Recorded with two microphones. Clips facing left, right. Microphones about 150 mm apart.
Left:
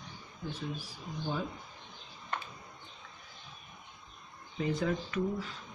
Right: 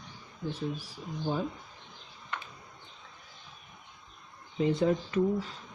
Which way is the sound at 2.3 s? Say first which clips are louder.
Left 2 dB; 40° left (ahead or behind).